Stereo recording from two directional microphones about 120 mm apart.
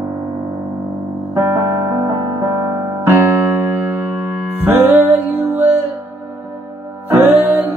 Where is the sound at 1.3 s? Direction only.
25° right (ahead or behind).